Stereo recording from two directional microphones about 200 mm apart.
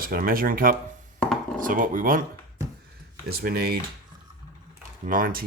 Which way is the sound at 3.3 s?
50° right (ahead or behind).